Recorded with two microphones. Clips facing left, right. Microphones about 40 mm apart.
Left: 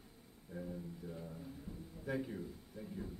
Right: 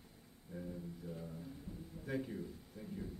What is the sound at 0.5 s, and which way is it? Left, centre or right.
Speech, centre.